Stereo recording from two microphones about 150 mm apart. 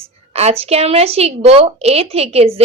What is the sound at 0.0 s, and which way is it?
A woman's voice, 45° right (ahead or behind).